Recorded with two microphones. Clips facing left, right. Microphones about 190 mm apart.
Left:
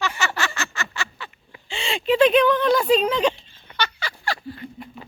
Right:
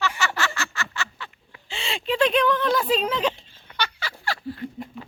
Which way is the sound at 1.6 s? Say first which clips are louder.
Left 5 dB; centre (ahead or behind).